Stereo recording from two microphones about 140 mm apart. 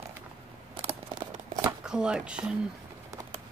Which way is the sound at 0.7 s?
40° right (ahead or behind).